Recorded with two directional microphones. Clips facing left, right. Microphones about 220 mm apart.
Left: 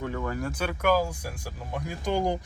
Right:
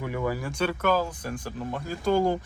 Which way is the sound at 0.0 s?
15° right (ahead or behind).